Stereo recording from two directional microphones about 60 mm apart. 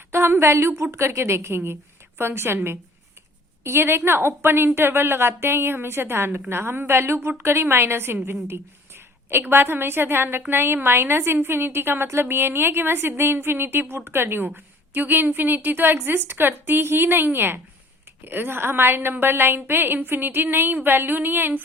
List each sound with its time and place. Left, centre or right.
0.1 s a woman's voice: right
3.6 s a woman's voice: right
9.3 s a woman's voice: right